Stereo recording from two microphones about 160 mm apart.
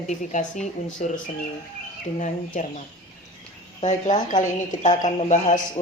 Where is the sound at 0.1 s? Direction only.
50° left (ahead or behind).